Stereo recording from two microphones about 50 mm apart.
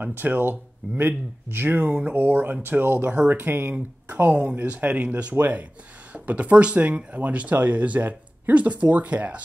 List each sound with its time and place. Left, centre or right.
0.0 s speech: right
1.9 s speech: right
2.1 s speech: right
3.1 s speech: right
3.3 s speech: right